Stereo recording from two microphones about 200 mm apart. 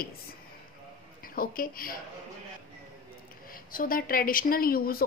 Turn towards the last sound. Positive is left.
turn(degrees=50)  # may be behind; listen again after turning